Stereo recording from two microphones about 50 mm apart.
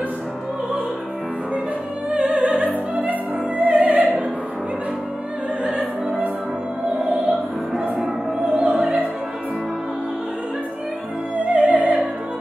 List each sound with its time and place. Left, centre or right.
2.0 s opera: right
7.8 s opera: right
11.4 s music: right